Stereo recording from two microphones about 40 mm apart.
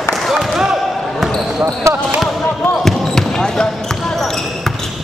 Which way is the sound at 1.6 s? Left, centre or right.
Right.